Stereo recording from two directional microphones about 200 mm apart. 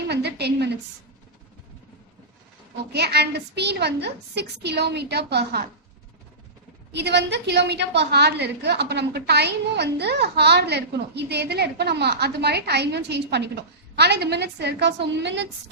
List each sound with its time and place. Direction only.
0.1 s a woman's voice: 55° right (ahead or behind)
2.9 s a woman's voice: 55° right (ahead or behind)
6.9 s a woman's voice: 60° right (ahead or behind)